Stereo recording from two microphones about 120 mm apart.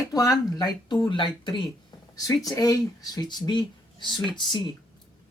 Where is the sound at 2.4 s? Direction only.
30° left (ahead or behind).